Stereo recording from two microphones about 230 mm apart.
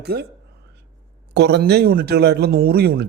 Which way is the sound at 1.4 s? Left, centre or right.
Right.